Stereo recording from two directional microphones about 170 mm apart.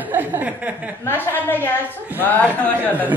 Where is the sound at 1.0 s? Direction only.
15° left (ahead or behind).